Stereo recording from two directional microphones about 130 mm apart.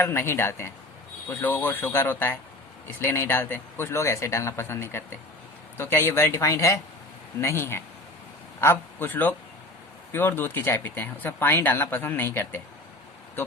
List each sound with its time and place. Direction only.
0.0 s speech: 20° left (ahead or behind)